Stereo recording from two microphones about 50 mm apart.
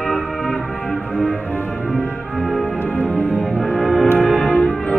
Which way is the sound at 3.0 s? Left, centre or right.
Left.